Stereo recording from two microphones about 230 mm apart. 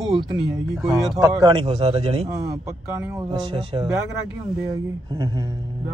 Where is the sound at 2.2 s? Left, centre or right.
Centre.